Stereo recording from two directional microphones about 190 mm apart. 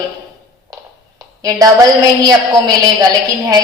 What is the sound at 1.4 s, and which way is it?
A woman's voice, 20° right (ahead or behind).